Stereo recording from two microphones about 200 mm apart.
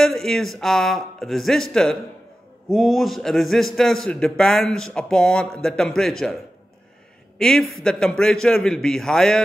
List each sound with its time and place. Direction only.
0.0 s a man's voice: centre (ahead or behind)